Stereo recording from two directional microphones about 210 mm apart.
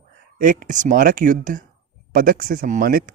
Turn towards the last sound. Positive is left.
turn(degrees=-40)  # may be behind; listen again after turning